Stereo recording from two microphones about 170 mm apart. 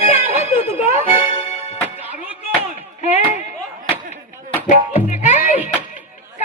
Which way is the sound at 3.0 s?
45° left (ahead or behind).